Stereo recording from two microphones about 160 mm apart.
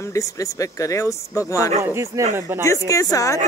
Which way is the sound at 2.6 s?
20° left (ahead or behind).